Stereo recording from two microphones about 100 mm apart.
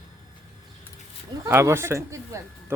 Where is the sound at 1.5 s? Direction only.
25° right (ahead or behind).